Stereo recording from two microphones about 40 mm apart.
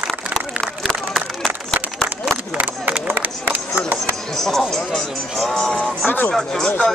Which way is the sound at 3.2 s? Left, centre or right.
Right.